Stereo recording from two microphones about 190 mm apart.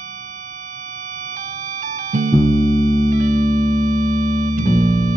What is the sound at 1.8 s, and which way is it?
Music, 45° right (ahead or behind).